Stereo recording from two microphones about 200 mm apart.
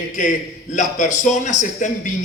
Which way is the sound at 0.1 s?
40° left (ahead or behind).